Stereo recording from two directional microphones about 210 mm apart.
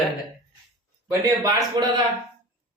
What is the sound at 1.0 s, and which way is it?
Speech, 15° right (ahead or behind).